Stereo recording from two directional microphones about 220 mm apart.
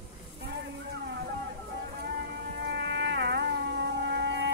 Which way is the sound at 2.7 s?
55° right (ahead or behind).